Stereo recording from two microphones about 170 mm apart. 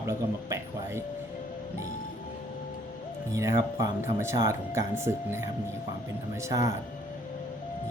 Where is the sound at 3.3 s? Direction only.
15° right (ahead or behind).